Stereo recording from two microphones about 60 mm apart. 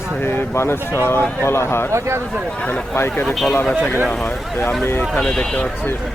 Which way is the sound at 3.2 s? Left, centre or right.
Centre.